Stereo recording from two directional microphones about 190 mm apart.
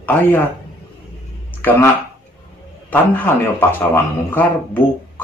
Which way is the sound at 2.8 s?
10° left (ahead or behind).